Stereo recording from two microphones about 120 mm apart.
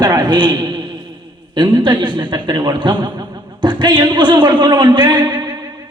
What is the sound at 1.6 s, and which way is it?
A man's voice, 40° right (ahead or behind).